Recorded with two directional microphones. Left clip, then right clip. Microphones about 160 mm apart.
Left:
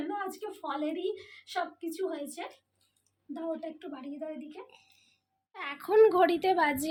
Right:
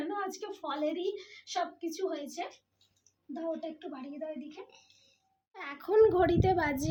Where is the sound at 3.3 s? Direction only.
25° left (ahead or behind).